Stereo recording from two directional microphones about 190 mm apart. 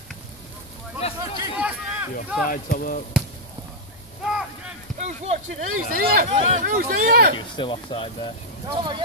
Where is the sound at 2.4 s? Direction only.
50° left (ahead or behind).